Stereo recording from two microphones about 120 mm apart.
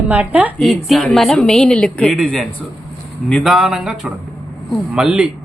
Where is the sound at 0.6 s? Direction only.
Centre (ahead or behind).